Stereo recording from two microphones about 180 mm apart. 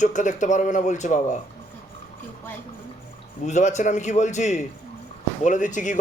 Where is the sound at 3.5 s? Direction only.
40° left (ahead or behind).